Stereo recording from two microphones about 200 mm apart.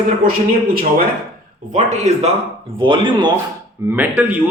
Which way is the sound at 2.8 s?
25° right (ahead or behind).